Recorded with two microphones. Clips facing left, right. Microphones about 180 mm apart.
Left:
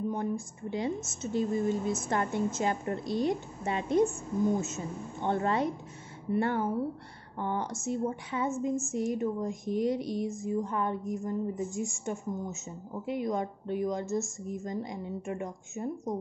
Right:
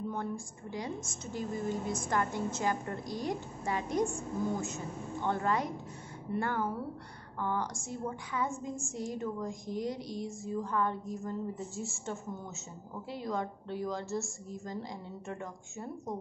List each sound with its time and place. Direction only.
0.1 s a woman's voice: 20° left (ahead or behind)